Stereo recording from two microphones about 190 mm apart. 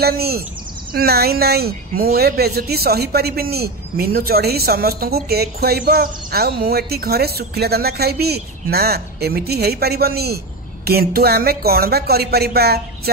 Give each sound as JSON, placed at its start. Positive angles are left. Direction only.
{"t": 0.0, "sound": "speech", "side_deg": -55}